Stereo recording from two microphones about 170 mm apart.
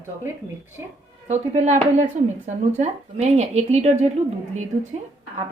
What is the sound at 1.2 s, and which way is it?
A woman's voice, 40° right (ahead or behind).